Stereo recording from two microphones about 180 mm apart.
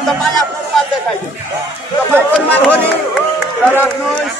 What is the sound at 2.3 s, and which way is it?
Speech, 10° left (ahead or behind).